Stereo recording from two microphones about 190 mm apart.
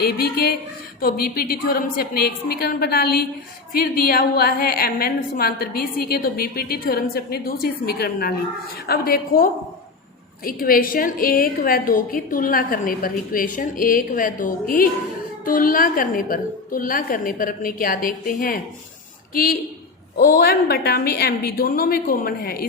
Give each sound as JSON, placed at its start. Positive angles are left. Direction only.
{"t": 0.0, "sound": "a woman's voice", "side_deg": 55}